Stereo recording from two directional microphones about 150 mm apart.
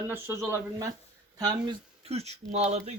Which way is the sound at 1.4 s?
30° right (ahead or behind).